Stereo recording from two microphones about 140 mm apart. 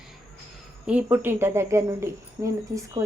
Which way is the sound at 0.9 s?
10° right (ahead or behind).